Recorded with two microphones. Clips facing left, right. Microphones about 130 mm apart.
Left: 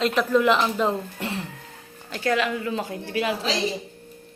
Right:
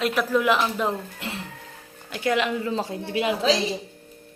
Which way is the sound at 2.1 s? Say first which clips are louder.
Even; 15° right (ahead or behind).